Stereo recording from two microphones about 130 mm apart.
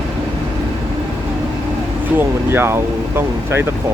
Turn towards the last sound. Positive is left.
turn(degrees=-20)  # may be behind; listen again after turning